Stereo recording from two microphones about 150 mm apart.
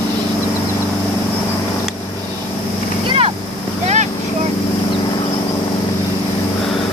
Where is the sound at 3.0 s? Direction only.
35° right (ahead or behind).